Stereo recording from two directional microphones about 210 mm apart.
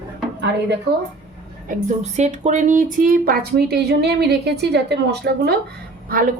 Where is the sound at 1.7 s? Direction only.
35° right (ahead or behind); by 5.5 s 50° right (ahead or behind).